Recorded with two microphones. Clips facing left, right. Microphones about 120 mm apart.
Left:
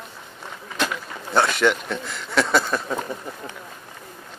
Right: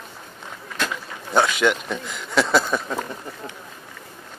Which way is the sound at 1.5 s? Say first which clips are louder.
Even; 5° right (ahead or behind).